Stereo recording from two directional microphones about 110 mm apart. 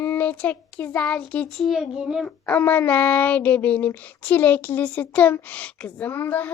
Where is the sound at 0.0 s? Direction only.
15° left (ahead or behind).